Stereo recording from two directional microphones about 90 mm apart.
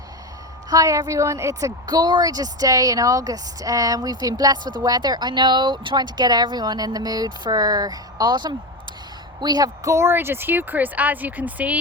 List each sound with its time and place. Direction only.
0.7 s a woman's voice: 40° right (ahead or behind)
1.9 s a woman's voice: 50° right (ahead or behind)
9.9 s speech: 30° right (ahead or behind)